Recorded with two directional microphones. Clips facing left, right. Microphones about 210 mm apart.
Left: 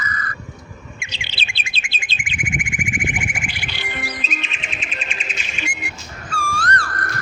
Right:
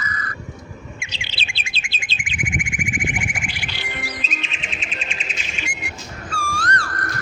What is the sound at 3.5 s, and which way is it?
Chirp, 60° left (ahead or behind).